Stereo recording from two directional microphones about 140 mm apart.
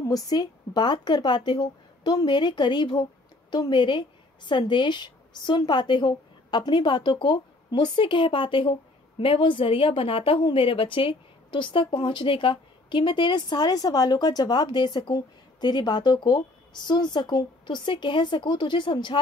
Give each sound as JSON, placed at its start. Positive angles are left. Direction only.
{"t": 0.1, "sound": "a woman's voice", "side_deg": 30}